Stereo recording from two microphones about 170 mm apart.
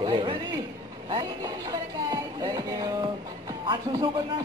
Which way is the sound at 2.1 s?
20° right (ahead or behind).